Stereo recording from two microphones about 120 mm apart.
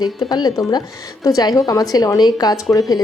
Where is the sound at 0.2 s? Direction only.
35° left (ahead or behind).